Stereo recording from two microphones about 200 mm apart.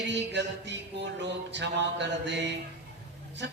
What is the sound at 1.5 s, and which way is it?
A man's voice, 60° right (ahead or behind).